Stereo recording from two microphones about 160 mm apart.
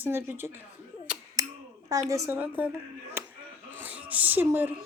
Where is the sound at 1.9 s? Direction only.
20° right (ahead or behind).